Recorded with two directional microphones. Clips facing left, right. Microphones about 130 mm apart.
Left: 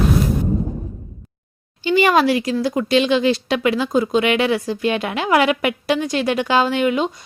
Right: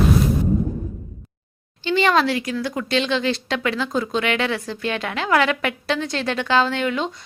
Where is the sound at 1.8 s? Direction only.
10° left (ahead or behind).